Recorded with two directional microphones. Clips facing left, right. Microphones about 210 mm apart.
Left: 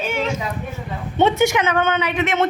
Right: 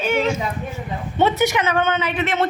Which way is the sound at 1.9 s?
15° left (ahead or behind).